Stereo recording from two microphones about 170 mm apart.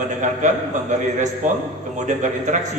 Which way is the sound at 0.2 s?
45° right (ahead or behind).